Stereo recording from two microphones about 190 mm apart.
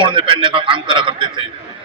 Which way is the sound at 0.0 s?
25° right (ahead or behind).